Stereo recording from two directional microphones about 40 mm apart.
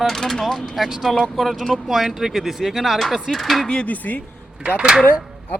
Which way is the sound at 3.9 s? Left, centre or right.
Left.